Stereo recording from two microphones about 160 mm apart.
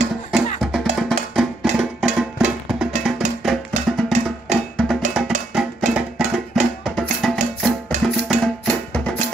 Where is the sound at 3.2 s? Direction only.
45° right (ahead or behind).